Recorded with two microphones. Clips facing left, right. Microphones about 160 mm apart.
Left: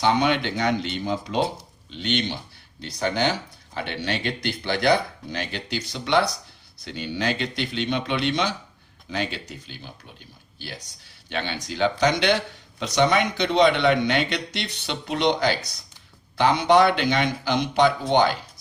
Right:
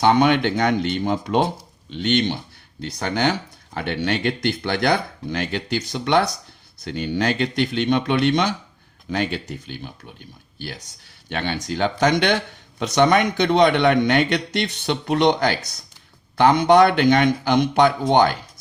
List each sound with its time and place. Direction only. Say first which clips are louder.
0.0 s a man's voice: right 5 dB; 55° right (ahead or behind)
11.3 s a man's voice: right 4 dB; 50° right (ahead or behind)